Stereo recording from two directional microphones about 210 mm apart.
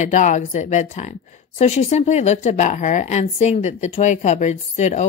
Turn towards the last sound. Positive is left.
turn(degrees=35)  # may be behind; listen again after turning